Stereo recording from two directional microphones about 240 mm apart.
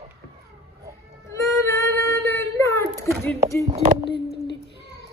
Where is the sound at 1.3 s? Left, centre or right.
Centre.